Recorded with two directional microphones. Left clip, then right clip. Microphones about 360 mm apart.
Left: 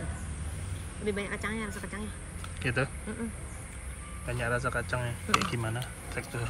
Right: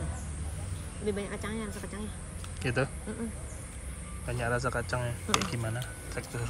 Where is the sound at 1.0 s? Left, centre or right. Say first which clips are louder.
Left 2 dB; centre.